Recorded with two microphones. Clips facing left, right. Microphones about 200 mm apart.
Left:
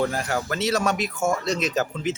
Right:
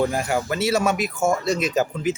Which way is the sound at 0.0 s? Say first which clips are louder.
Right 3 dB; 10° right (ahead or behind).